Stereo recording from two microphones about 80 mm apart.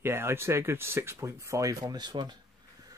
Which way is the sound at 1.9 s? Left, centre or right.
Right.